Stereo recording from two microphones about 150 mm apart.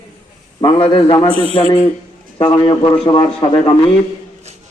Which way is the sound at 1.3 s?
40° right (ahead or behind).